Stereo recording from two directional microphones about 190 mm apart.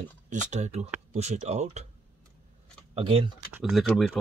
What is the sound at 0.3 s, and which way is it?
Speech, 40° right (ahead or behind).